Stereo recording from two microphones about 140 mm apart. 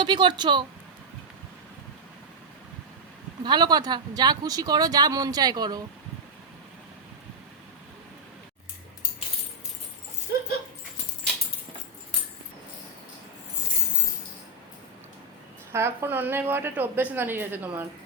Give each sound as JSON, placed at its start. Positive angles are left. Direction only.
{"t": 0.0, "sound": "speech", "side_deg": -35}
{"t": 3.4, "sound": "speech", "side_deg": -30}
{"t": 15.7, "sound": "a woman's voice", "side_deg": -20}